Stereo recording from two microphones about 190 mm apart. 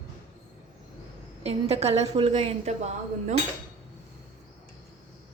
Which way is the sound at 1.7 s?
35° right (ahead or behind).